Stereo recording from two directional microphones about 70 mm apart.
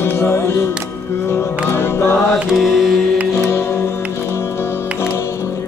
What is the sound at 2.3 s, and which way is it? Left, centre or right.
Mantra, centre.